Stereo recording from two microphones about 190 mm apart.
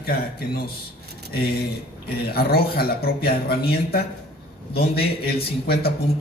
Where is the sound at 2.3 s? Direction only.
55° left (ahead or behind).